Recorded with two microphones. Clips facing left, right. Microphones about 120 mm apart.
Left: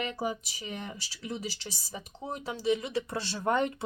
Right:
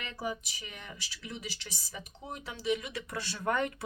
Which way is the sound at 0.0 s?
30° left (ahead or behind).